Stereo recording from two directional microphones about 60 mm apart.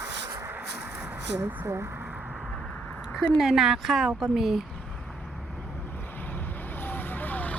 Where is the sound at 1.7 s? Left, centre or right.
Right.